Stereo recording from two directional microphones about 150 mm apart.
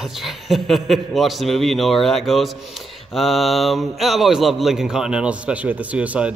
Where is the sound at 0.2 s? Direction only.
Centre (ahead or behind).